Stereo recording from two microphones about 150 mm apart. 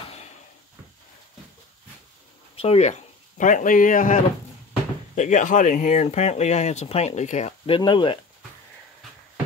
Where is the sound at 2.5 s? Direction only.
40° left (ahead or behind).